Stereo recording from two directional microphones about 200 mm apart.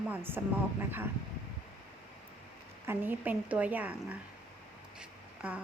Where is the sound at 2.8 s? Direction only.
10° right (ahead or behind).